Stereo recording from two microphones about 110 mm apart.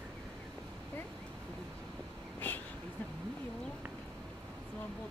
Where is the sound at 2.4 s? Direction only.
15° left (ahead or behind).